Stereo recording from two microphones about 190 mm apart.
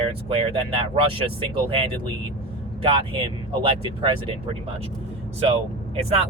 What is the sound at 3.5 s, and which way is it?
Speech, 30° right (ahead or behind).